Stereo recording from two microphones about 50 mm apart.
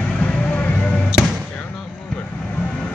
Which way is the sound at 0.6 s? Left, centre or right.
Left.